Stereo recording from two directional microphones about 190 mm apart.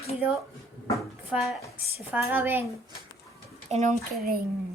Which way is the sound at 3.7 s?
35° right (ahead or behind).